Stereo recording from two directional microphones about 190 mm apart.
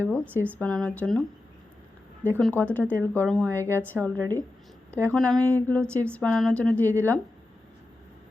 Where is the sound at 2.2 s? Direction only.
10° left (ahead or behind).